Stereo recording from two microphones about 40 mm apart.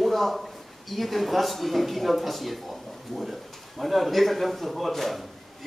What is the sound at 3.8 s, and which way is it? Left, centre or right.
A man's voice, centre.